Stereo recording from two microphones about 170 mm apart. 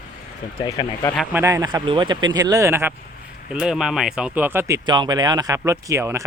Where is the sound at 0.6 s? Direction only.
20° left (ahead or behind).